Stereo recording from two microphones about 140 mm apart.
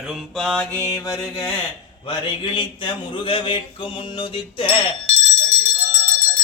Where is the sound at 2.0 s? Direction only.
40° left (ahead or behind).